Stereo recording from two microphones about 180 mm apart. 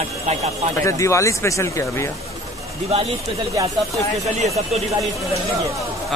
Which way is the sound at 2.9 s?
35° right (ahead or behind).